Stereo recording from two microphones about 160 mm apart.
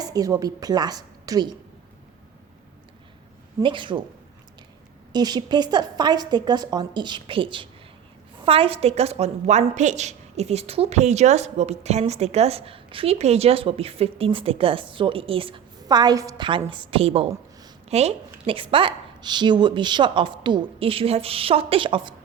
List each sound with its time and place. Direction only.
0.0 s a woman's voice: 20° right (ahead or behind)
3.6 s a woman's voice: 30° right (ahead or behind)
5.1 s a woman's voice: 25° right (ahead or behind)